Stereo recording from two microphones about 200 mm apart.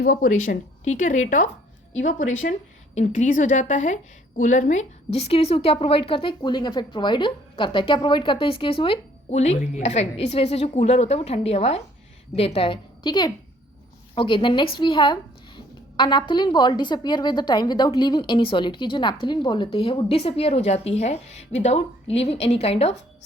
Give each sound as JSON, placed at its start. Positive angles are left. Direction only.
{"t": 0.0, "sound": "a woman's voice", "side_deg": 45}